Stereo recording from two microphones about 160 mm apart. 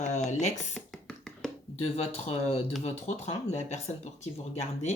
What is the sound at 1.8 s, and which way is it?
Speech, 40° left (ahead or behind).